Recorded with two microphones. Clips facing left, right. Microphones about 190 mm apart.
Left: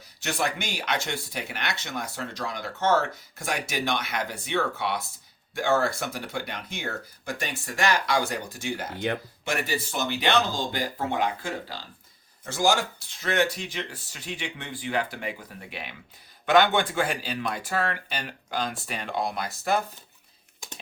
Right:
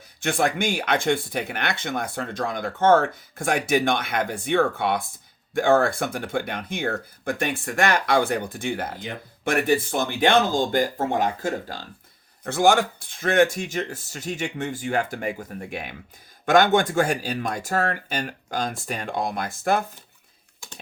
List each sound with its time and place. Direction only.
0.2 s speech: 50° right (ahead or behind)
12.5 s speech: 60° right (ahead or behind)